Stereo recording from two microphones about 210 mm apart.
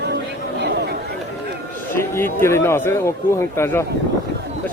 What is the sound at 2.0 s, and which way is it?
Speech, 10° left (ahead or behind).